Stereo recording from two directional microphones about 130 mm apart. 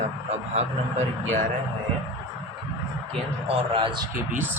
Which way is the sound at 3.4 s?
45° right (ahead or behind).